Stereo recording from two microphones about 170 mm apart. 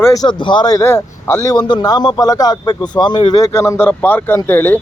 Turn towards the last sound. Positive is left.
turn(degrees=10)  # may be behind; listen again after turning